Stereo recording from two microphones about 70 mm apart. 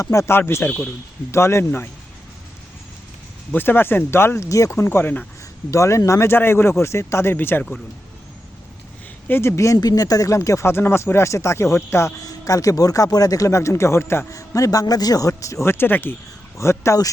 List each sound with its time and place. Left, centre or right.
0.0 s speech: left
0.3 s speech: left
3.5 s speech: left
4.4 s speech: left
5.7 s speech: left
9.2 s speech: left
9.8 s speech: left
12.2 s speech: left
14.3 s speech: left
15.6 s speech: left
16.6 s speech: left